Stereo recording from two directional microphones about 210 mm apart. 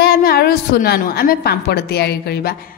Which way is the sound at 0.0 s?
45° left (ahead or behind).